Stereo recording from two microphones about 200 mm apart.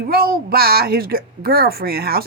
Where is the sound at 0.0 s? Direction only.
50° right (ahead or behind).